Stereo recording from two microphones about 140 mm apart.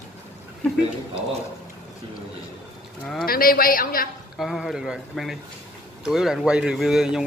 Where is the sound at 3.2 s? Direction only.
90° left.